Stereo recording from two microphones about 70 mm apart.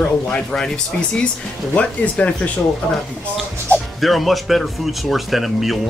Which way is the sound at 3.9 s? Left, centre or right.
Centre.